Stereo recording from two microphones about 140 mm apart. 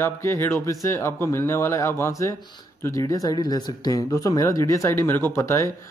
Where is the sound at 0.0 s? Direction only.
20° left (ahead or behind).